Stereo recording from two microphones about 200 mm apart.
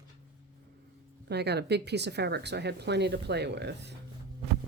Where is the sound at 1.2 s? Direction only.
55° right (ahead or behind).